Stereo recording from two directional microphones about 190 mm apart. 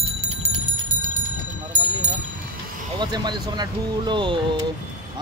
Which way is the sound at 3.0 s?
25° right (ahead or behind).